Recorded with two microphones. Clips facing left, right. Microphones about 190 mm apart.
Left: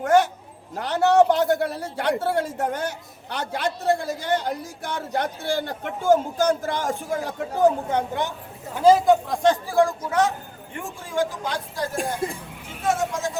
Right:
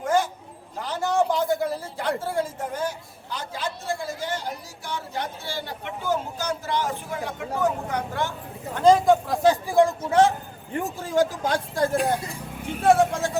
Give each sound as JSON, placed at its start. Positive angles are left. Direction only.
{"t": 0.0, "sound": "a sound", "side_deg": 70}
{"t": 0.8, "sound": "a man's voice", "side_deg": 70}
{"t": 8.7, "sound": "speech", "side_deg": 5}
{"t": 9.7, "sound": "speech", "side_deg": -25}
{"t": 10.8, "sound": "speech", "side_deg": -40}
{"t": 11.9, "sound": "a man's voice", "side_deg": 50}
{"t": 12.8, "sound": "speech", "side_deg": -60}